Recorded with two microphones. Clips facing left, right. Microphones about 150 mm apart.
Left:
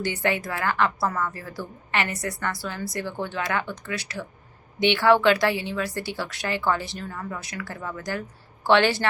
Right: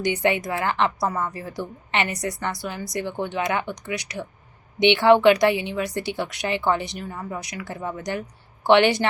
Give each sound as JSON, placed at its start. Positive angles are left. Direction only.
{"t": 0.0, "sound": "a woman's voice", "side_deg": -20}